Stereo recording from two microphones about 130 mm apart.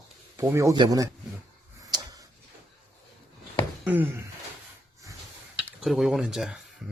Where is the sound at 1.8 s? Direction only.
25° right (ahead or behind).